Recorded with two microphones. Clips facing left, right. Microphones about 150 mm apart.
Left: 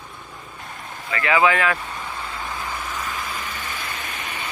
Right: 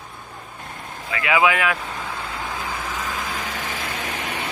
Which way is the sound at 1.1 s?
10° right (ahead or behind).